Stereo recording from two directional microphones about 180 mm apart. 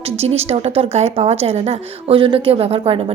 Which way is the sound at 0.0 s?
35° right (ahead or behind).